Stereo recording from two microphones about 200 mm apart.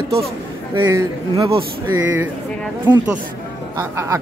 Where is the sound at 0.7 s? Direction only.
20° right (ahead or behind).